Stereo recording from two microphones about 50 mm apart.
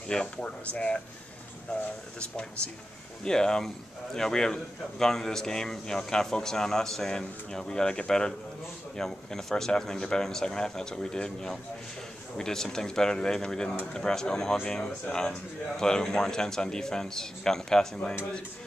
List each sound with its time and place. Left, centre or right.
0.1 s a man's voice: centre